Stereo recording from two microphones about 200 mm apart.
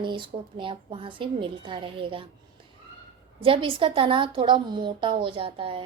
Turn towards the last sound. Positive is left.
turn(degrees=-25)  # may be behind; listen again after turning